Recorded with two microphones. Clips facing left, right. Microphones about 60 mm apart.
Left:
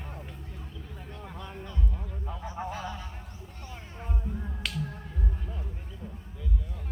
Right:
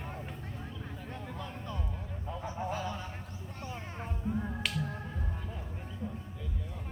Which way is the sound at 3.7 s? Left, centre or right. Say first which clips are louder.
Left 1 dB; centre.